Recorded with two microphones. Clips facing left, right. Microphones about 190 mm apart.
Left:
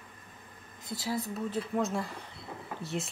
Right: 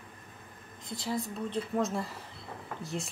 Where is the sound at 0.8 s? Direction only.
5° left (ahead or behind).